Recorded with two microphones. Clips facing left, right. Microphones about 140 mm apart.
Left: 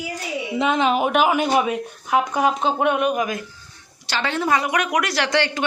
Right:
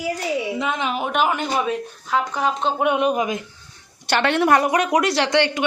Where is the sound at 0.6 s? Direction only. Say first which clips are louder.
Left 5 dB; 85° left.